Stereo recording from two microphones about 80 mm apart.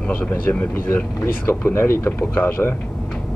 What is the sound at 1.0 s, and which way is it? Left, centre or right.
Speech, left.